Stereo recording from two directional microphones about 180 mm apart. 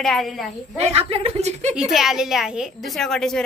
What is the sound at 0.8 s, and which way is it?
Speech, 35° right (ahead or behind).